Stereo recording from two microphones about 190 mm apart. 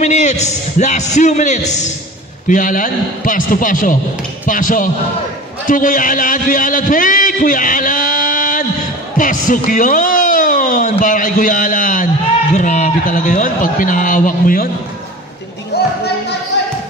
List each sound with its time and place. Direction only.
0.0 s a man's voice: 40° left (ahead or behind)
15.7 s music: 55° left (ahead or behind)